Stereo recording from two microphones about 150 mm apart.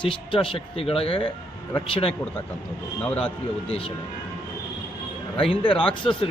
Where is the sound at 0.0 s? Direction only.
35° left (ahead or behind).